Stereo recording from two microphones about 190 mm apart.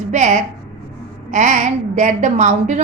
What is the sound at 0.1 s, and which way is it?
A woman's voice, 40° right (ahead or behind).